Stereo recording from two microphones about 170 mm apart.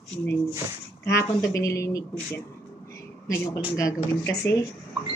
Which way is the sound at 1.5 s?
20° left (ahead or behind).